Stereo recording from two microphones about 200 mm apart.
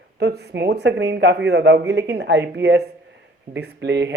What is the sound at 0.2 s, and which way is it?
Speech, 55° right (ahead or behind).